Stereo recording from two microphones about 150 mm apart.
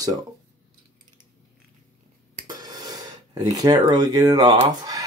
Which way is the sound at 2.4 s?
25° right (ahead or behind).